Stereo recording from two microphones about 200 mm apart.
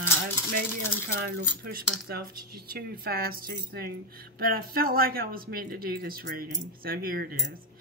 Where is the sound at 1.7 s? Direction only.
50° right (ahead or behind).